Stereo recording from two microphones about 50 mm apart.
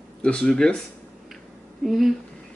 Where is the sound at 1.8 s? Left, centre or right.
Centre.